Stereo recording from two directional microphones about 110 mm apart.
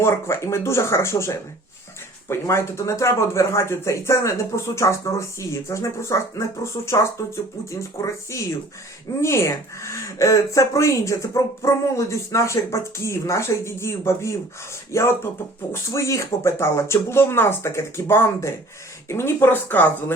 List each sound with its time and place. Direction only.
0.0 s speech: 25° left (ahead or behind)
9.2 s speech: 25° left (ahead or behind)